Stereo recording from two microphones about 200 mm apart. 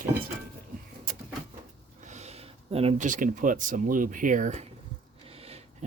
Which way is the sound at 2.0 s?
35° right (ahead or behind).